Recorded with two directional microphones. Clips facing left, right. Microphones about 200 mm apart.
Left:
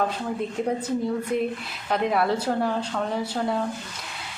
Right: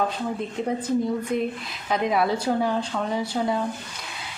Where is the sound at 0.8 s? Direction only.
10° left (ahead or behind).